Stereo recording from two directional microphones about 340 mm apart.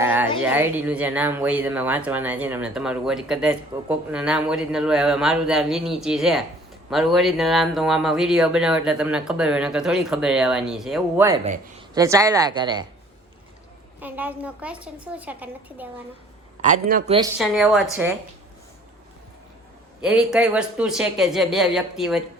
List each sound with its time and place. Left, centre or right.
0.0 s a sound: centre
0.4 s speech: centre
14.0 s speech: centre
16.6 s a man's voice: right
17.2 s speech: centre
20.0 s speech: centre